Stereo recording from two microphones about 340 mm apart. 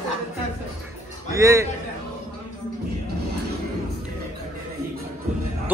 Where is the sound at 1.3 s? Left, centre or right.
Centre.